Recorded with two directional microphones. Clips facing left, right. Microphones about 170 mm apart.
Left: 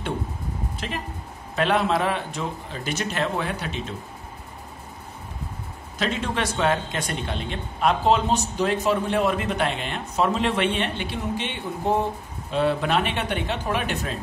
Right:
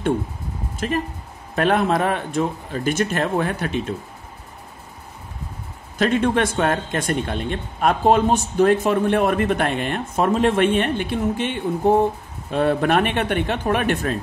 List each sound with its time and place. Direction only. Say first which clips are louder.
0.7 s speech: right 8 dB; 45° right (ahead or behind)
5.9 s speech: right 8 dB; 50° right (ahead or behind)